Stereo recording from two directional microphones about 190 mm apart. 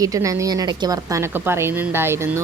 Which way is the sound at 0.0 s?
15° right (ahead or behind).